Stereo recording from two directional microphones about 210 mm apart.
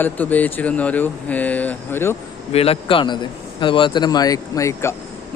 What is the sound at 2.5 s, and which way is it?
A man's voice, 30° left (ahead or behind).